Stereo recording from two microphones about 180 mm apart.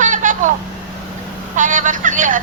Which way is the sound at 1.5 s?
45° right (ahead or behind).